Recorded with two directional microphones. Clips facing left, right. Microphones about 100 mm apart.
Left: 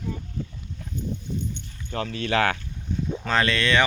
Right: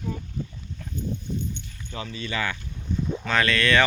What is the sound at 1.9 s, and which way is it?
Speech, 60° left (ahead or behind).